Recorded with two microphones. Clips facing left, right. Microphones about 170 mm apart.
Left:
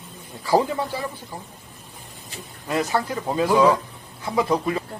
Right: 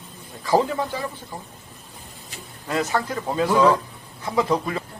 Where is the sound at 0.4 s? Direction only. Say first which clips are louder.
Even; 15° left (ahead or behind).